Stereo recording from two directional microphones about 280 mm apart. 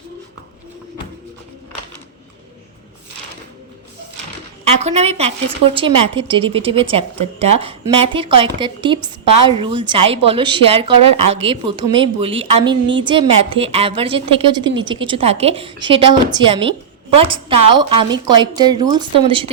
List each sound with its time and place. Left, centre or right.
4.8 s a woman's voice: right